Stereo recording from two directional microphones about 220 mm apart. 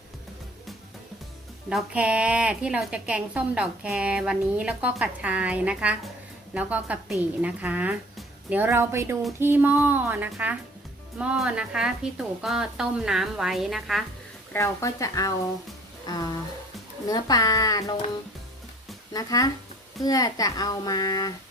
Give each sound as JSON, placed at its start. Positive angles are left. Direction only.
{"t": 1.7, "sound": "a woman's voice", "side_deg": -5}
{"t": 14.5, "sound": "a child's voice", "side_deg": 15}
{"t": 19.1, "sound": "a child's voice", "side_deg": 15}